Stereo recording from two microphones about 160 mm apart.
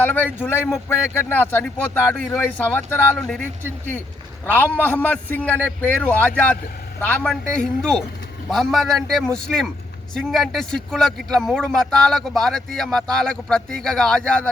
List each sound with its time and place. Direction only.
0.0 s a man's voice: 10° left (ahead or behind)
4.4 s a man's voice: 10° left (ahead or behind)